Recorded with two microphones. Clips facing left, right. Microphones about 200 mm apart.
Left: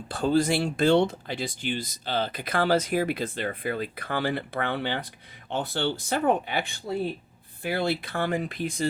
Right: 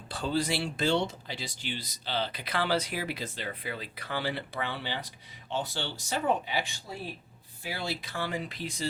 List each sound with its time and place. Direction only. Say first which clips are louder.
0.1 s speech: left 7 dB; 50° left (ahead or behind)